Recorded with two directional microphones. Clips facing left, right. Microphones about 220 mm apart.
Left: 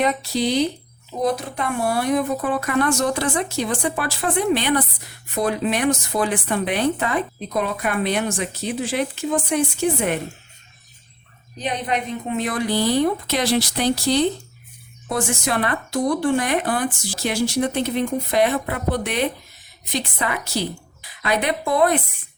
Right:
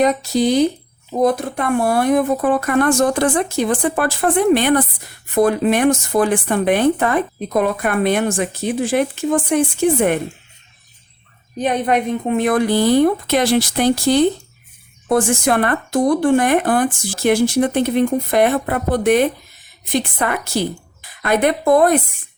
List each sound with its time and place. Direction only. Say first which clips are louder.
0.0 s speech: right 5 dB; 45° right (ahead or behind)
11.5 s speech: right 7 dB; 50° right (ahead or behind)